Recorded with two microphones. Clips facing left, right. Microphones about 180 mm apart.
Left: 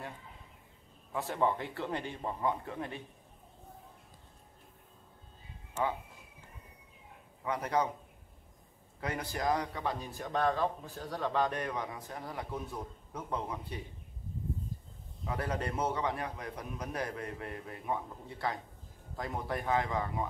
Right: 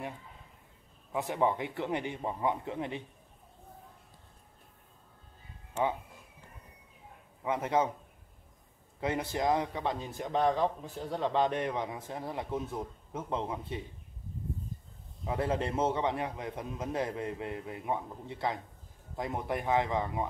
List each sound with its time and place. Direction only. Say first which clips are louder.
1.1 s a man's voice: right 2 dB; 20° right (ahead or behind)
7.4 s a man's voice: right 3 dB; 25° right (ahead or behind)
9.0 s a man's voice: right 4 dB; 25° right (ahead or behind)
15.2 s a man's voice: right 4 dB; 25° right (ahead or behind)